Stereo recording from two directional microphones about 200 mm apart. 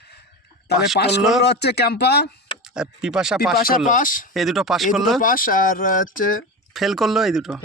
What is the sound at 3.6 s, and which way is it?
Speech, 45° left (ahead or behind).